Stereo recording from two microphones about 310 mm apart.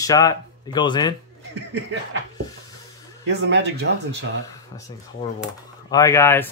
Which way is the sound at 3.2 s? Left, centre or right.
Right.